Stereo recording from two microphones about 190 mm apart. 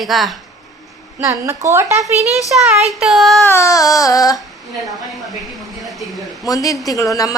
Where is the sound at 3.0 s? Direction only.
Centre (ahead or behind).